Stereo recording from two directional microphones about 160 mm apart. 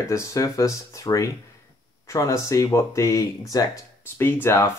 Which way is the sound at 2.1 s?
20° left (ahead or behind).